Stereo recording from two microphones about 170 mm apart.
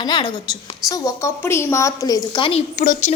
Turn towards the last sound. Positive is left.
turn(degrees=55)  # may be behind; listen again after turning